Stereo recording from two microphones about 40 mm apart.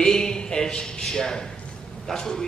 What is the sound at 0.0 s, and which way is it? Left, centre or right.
A man's voice, centre.